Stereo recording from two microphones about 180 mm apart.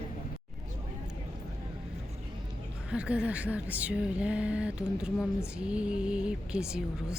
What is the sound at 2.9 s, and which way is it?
Speech, 5° right (ahead or behind).